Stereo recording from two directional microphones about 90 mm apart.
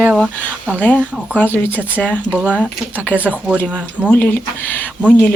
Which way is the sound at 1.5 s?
25° left (ahead or behind).